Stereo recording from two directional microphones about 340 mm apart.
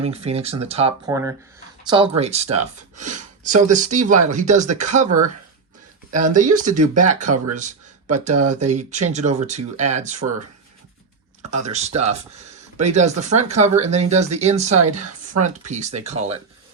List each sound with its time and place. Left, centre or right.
0.0 s speech: centre
11.5 s speech: centre